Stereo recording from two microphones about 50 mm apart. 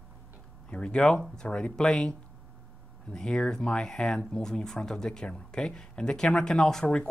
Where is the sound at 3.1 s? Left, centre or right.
Centre.